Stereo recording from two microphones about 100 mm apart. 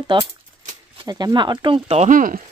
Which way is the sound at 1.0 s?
45° right (ahead or behind).